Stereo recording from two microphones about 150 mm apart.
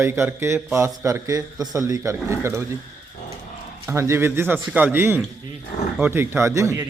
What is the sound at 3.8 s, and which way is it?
A man's voice, 20° right (ahead or behind).